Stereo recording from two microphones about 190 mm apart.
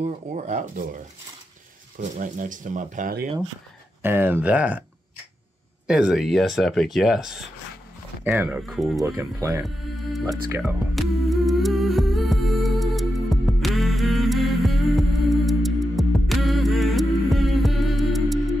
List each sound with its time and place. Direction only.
0.0 s speech: 40° right (ahead or behind)
4.0 s speech: 10° right (ahead or behind)
5.9 s speech: 5° right (ahead or behind)
9.0 s speech: 15° right (ahead or behind)
10.6 s humming: centre (ahead or behind)